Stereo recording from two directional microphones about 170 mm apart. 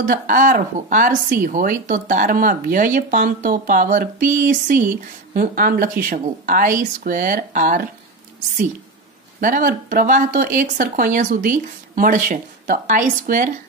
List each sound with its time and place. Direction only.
0.0 s speech: 50° right (ahead or behind)
9.4 s speech: 50° right (ahead or behind)